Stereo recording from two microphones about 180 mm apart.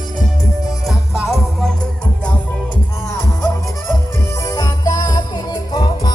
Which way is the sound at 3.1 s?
15° left (ahead or behind).